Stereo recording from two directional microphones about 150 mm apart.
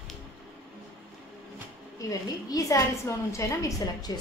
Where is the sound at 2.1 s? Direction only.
25° left (ahead or behind).